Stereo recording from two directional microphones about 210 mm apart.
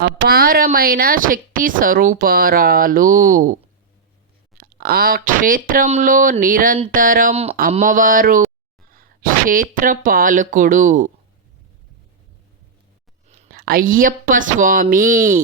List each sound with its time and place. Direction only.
0.0 s speech: 45° right (ahead or behind)
13.2 s speech: 30° right (ahead or behind)